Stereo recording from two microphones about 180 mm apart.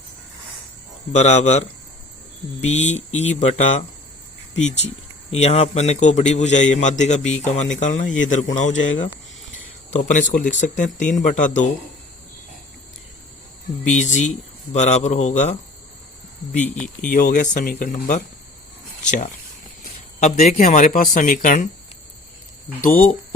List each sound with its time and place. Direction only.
1.1 s a man's voice: 40° left (ahead or behind)
2.6 s a man's voice: 35° left (ahead or behind)
5.3 s a man's voice: 35° left (ahead or behind)
9.9 s speech: 45° left (ahead or behind)
13.9 s a man's voice: 40° left (ahead or behind)
16.6 s speech: 5° left (ahead or behind)
17.1 s speech: 50° left (ahead or behind)